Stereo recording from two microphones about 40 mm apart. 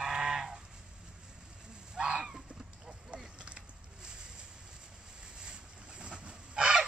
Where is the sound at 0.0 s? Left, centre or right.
Centre.